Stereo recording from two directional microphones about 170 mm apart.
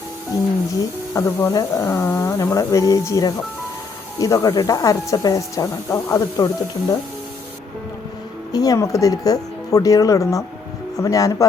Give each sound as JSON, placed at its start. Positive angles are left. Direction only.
{"t": 0.7, "sound": "speech", "side_deg": 20}
{"t": 8.5, "sound": "speech", "side_deg": 20}